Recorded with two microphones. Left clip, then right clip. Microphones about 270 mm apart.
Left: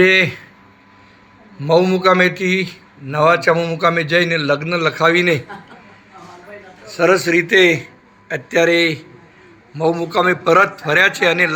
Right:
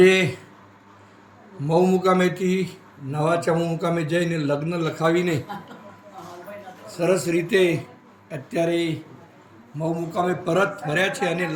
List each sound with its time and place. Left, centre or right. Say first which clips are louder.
0.0 s a man's voice: left 4 dB; centre
1.6 s a man's voice: left 6 dB; centre
6.9 s a man's voice: left 8 dB; centre
10.2 s a man's voice: left 8 dB; left
10.5 s a man's voice: left 11 dB; centre